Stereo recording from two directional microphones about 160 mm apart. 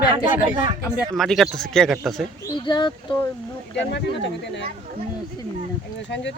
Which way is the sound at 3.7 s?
90° left.